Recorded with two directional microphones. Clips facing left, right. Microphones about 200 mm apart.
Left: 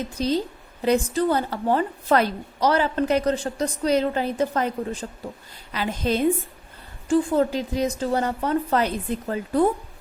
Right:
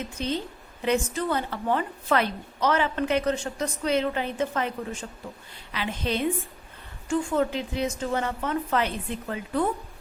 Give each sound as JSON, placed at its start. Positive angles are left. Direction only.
{"t": 0.0, "sound": "speech", "side_deg": 35}